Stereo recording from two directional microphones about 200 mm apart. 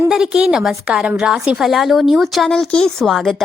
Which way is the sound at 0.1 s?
5° right (ahead or behind).